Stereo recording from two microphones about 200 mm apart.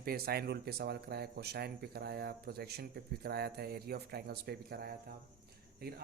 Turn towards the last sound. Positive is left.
turn(degrees=-50)  # may be behind; listen again after turning